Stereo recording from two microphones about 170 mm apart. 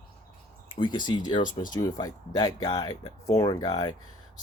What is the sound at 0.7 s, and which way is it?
Speech, 30° left (ahead or behind).